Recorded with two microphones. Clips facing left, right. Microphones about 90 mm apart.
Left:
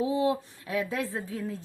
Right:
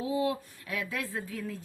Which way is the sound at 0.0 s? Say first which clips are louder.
Left 4 dB; 25° left (ahead or behind).